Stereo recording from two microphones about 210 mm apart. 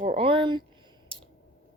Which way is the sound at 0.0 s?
30° right (ahead or behind).